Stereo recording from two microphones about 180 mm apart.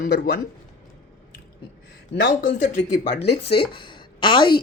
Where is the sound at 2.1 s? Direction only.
65° left (ahead or behind).